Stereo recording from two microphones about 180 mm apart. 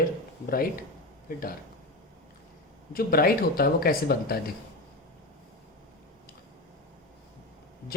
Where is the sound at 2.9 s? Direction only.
55° left (ahead or behind).